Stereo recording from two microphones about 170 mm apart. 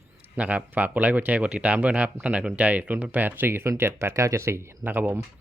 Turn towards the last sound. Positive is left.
turn(degrees=-10)  # may be behind; listen again after turning